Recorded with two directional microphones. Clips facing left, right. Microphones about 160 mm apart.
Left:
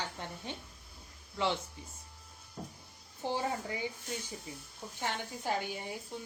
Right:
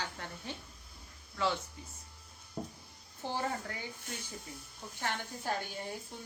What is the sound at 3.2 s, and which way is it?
Speech, 15° left (ahead or behind).